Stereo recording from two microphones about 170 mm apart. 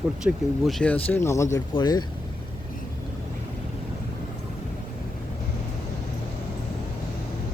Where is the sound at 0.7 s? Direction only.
5° left (ahead or behind); by 2.0 s 25° left (ahead or behind).